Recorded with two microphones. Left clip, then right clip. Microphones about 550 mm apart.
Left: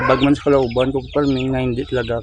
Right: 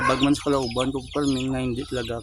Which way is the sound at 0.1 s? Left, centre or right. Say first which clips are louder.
Left 7 dB; right.